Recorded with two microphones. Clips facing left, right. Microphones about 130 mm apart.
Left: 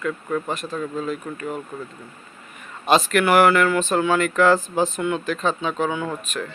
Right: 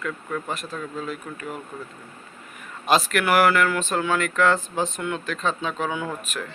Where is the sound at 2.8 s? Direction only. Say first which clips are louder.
Left 3 dB; centre (ahead or behind).